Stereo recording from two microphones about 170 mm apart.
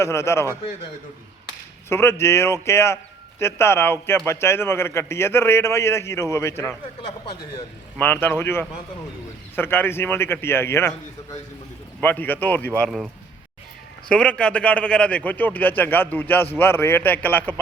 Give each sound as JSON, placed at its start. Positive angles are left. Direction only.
{"t": 0.0, "sound": "a man's voice", "side_deg": 15}
{"t": 1.9, "sound": "a man's voice", "side_deg": 15}
{"t": 7.9, "sound": "a man's voice", "side_deg": 10}
{"t": 14.1, "sound": "a man's voice", "side_deg": 5}